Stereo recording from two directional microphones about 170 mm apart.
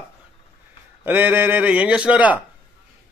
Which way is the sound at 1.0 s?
10° right (ahead or behind).